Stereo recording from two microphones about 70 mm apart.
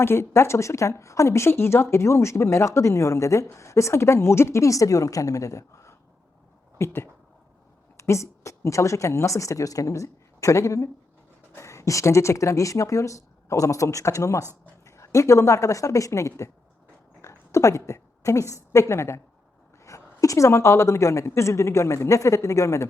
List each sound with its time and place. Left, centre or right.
0.0 s a woman's voice: left